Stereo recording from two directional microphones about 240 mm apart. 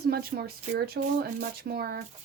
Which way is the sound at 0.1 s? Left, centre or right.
Right.